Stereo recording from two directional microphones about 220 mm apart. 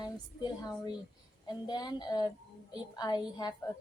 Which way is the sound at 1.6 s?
15° left (ahead or behind).